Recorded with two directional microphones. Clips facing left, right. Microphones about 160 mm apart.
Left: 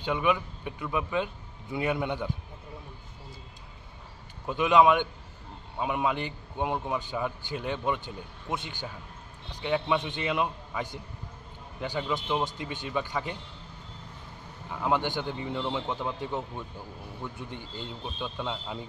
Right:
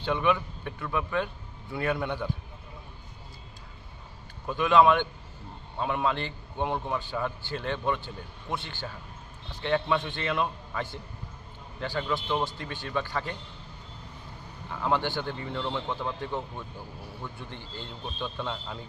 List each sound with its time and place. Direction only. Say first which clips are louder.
0.0 s a man's voice: right 1 dB; 10° left (ahead or behind)
4.5 s a man's voice: even; 15° left (ahead or behind)
14.7 s a man's voice: even; 15° left (ahead or behind)